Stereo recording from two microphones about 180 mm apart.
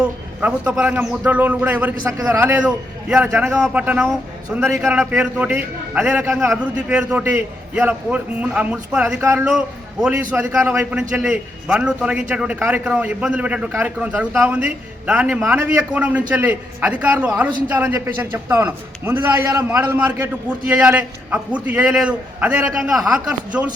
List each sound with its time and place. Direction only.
0.0 s a man's voice: 10° right (ahead or behind)